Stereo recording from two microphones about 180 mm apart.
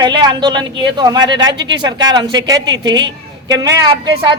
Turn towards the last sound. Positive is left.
turn(degrees=-25)  # may be behind; listen again after turning